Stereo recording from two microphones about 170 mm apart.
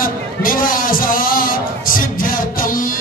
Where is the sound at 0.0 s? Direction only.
55° left (ahead or behind).